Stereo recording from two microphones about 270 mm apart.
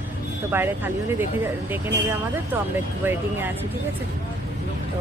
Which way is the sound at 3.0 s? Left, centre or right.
Centre.